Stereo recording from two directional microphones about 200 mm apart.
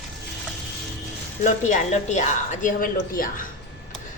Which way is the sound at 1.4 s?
35° left (ahead or behind).